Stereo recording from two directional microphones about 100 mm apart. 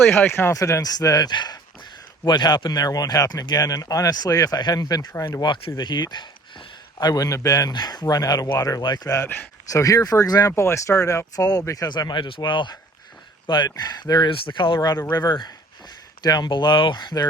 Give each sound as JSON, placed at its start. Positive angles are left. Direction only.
{"t": 0.1, "sound": "speech", "side_deg": 20}
{"t": 9.2, "sound": "speech", "side_deg": 15}
{"t": 9.6, "sound": "speech", "side_deg": 35}
{"t": 14.3, "sound": "speech", "side_deg": 60}
{"t": 15.1, "sound": "speech", "side_deg": 45}